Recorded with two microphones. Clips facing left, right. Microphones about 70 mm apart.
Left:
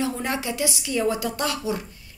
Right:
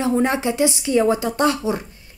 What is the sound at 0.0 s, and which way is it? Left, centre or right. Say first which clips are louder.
A woman's voice: right 7 dB; right.